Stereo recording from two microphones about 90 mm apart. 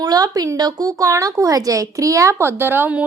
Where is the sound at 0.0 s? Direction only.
45° right (ahead or behind).